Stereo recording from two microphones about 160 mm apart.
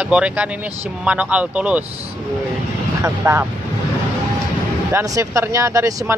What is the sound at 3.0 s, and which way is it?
Speech, 15° right (ahead or behind).